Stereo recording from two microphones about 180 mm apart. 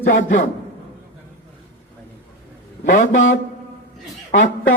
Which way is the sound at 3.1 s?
90° left.